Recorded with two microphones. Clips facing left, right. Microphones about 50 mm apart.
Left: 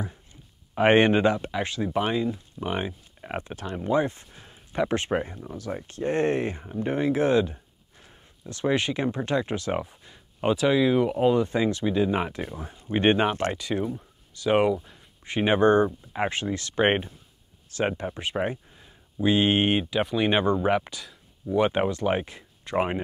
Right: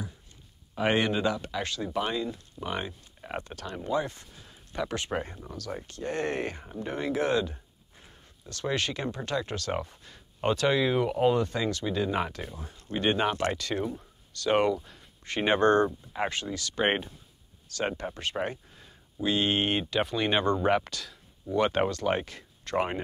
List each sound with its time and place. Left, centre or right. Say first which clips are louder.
0.7 s speech: left 7 dB; left
1.4 s speech: left 4 dB; left
4.4 s a sound: left 6 dB; left
5.5 s speech: left 4 dB; centre
5.9 s speech: left 7 dB; left; by 11.4 s centre
11.4 s speech: left 5 dB; left
13.5 s speech: left 2 dB; centre
19.8 s speech: left 3 dB; centre